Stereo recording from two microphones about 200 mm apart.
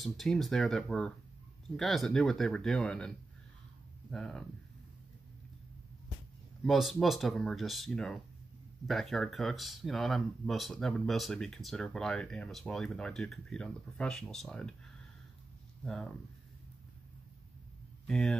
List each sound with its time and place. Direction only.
0.0 s speech: centre (ahead or behind)
4.1 s speech: centre (ahead or behind)
6.6 s speech: centre (ahead or behind)
15.8 s speech: 5° left (ahead or behind)
18.0 s speech: centre (ahead or behind)